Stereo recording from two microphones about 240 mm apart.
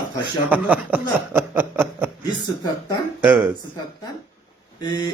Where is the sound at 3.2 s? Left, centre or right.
Centre.